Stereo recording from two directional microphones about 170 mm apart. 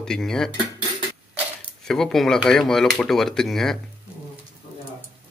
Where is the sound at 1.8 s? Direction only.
Centre (ahead or behind).